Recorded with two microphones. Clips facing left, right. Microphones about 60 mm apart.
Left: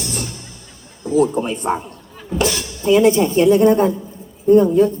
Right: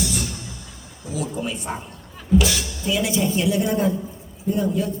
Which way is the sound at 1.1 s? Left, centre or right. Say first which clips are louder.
Left 11 dB; left.